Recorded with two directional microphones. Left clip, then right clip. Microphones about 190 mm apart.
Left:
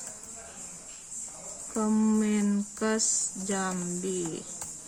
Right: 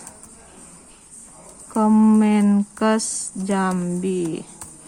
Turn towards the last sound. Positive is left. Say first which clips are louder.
# right 9 dB
turn(degrees=-45)  # may be behind; listen again after turning